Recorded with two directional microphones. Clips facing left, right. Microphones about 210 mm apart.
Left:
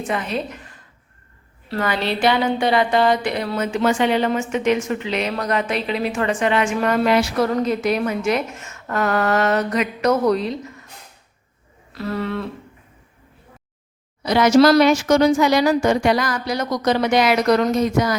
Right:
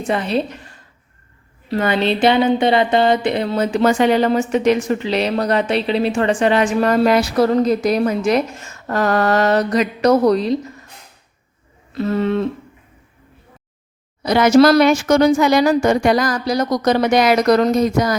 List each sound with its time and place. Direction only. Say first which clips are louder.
0.1 s speech: right 7 dB; 30° right (ahead or behind)
1.7 s speech: right 5 dB; 20° right (ahead or behind)
11.9 s a sound: right 7 dB; 25° right (ahead or behind)
14.2 s speech: right 2 dB; 50° right (ahead or behind)